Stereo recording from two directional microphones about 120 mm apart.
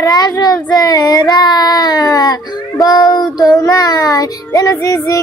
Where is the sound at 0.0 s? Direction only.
30° left (ahead or behind).